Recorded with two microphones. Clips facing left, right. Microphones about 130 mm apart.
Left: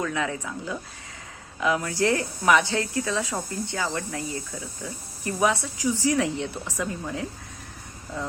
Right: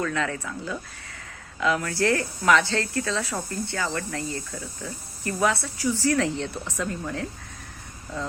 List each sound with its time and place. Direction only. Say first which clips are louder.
0.0 s speech: even; 15° left (ahead or behind)
4.5 s speech: even; centre (ahead or behind)
4.9 s speech: even; 20° left (ahead or behind)